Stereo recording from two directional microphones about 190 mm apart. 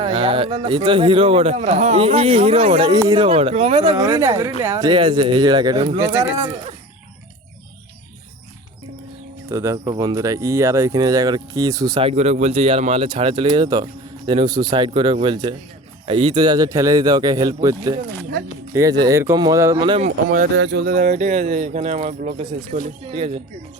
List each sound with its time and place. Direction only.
0.0 s speech: 30° right (ahead or behind)
4.0 s speech: 20° right (ahead or behind)
9.5 s speech: 15° right (ahead or behind)
20.1 s speech: 45° right (ahead or behind)
20.6 s speech: 70° right (ahead or behind); by 22.8 s 45° right (ahead or behind)
23.1 s speech: 30° right (ahead or behind)